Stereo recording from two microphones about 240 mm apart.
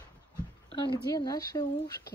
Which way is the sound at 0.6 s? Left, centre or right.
Centre.